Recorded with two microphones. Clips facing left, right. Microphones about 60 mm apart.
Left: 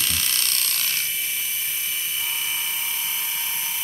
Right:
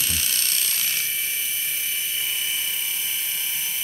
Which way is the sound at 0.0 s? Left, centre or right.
Left.